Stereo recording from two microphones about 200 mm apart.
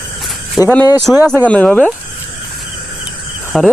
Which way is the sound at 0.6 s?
5° right (ahead or behind).